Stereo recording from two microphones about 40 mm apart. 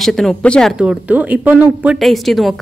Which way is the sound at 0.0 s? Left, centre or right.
Centre.